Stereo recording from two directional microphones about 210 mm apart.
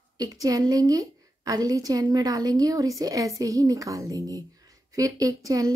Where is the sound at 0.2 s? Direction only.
15° right (ahead or behind).